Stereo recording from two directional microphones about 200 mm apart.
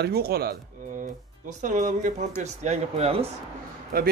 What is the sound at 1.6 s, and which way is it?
Speech, 40° right (ahead or behind).